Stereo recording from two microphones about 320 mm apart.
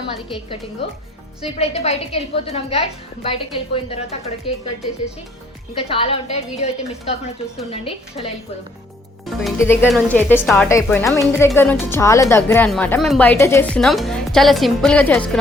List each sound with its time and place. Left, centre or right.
0.8 s a woman's voice: centre
5.7 s a woman's voice: centre
9.2 s speech: centre